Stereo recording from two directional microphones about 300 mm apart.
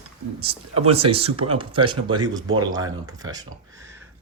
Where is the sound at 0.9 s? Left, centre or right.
Centre.